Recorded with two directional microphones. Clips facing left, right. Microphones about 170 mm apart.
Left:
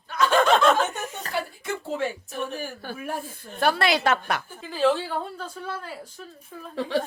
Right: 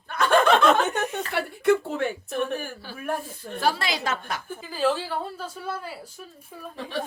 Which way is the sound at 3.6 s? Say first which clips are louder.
Left 4 dB; 60° left (ahead or behind).